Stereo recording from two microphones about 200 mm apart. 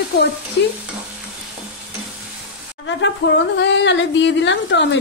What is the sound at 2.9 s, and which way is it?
Speech, 65° left (ahead or behind).